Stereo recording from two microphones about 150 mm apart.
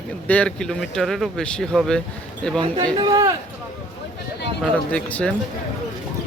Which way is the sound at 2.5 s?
35° right (ahead or behind).